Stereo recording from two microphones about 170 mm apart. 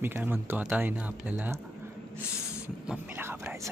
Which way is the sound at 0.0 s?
10° right (ahead or behind).